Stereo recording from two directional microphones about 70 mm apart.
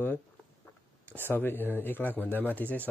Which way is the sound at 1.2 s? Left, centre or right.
Left.